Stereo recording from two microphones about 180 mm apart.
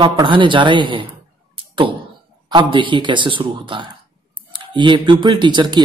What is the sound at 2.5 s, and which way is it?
Speech, 25° right (ahead or behind).